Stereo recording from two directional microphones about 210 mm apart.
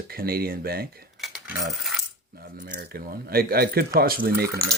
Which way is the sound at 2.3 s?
40° right (ahead or behind).